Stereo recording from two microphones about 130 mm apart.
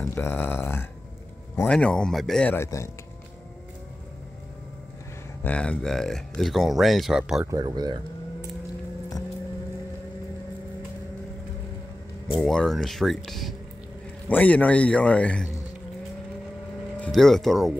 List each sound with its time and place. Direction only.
0.1 s a man's voice: 15° left (ahead or behind)
2.5 s speech: 20° left (ahead or behind)
5.4 s speech: 10° left (ahead or behind)
7.5 s speech: 30° right (ahead or behind)
12.4 s speech: centre (ahead or behind)
14.2 s a man's voice: 10° left (ahead or behind)
17.0 s speech: centre (ahead or behind)